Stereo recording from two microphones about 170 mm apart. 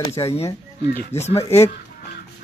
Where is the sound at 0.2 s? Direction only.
25° left (ahead or behind).